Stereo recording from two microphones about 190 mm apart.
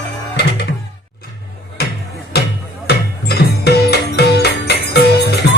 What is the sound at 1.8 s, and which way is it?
Music, 55° left (ahead or behind).